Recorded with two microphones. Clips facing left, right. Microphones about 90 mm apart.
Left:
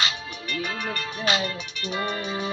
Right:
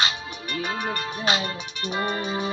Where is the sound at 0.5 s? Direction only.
25° right (ahead or behind).